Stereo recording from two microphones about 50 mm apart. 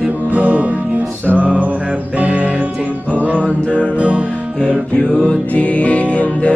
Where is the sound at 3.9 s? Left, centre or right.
Right.